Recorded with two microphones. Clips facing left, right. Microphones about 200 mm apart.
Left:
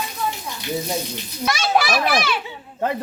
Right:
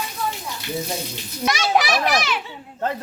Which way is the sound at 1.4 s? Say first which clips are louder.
Even; 20° right (ahead or behind).